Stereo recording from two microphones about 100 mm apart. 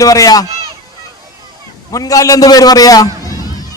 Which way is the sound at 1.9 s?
35° left (ahead or behind).